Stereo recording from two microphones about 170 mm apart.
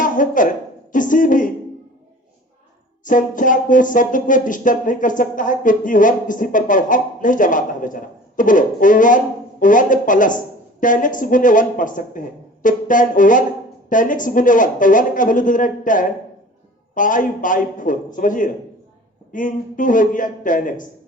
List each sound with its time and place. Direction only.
0.0 s a sound: 50° left (ahead or behind)
0.9 s speech: 50° left (ahead or behind)
3.0 s speech: 50° left (ahead or behind)